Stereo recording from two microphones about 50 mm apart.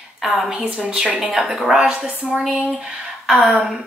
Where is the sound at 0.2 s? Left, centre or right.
Centre.